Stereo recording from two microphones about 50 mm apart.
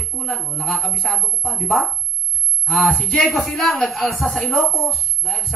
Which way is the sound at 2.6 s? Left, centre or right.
Centre.